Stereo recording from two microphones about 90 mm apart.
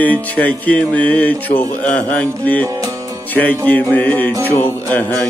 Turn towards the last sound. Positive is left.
turn(degrees=15)  # may be behind; listen again after turning